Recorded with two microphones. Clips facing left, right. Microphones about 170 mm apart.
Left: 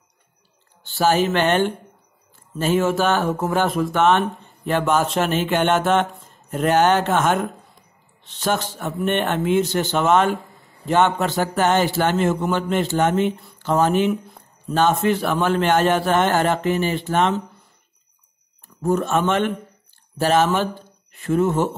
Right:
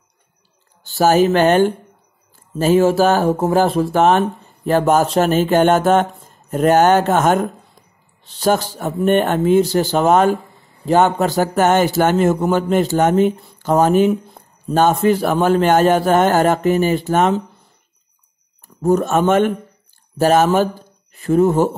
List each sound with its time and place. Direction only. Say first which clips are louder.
0.8 s speech: right 5 dB; 45° right (ahead or behind)
18.8 s speech: right 5 dB; 40° right (ahead or behind)